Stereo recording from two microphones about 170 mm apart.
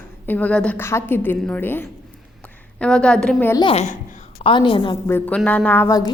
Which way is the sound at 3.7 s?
40° left (ahead or behind).